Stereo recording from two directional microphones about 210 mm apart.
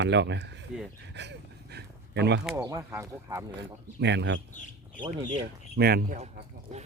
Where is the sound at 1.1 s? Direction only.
55° right (ahead or behind).